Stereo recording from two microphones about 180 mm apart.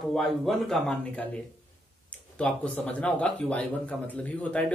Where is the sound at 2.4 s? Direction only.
5° left (ahead or behind).